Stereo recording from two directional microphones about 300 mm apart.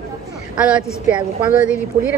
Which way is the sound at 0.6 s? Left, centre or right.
Centre.